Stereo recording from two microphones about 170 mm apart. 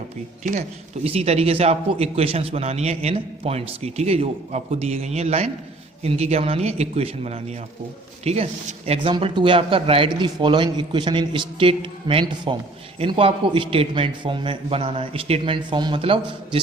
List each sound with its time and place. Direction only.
1.0 s a man's voice: 35° right (ahead or behind)